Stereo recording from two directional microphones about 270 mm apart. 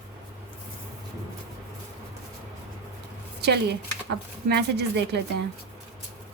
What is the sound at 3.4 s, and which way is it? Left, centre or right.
A woman's voice, right.